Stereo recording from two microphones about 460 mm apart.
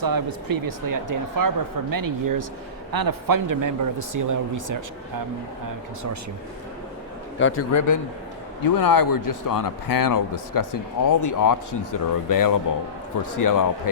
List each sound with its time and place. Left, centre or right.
0.0 s a man's voice: right
7.3 s a man's voice: left
8.6 s a man's voice: left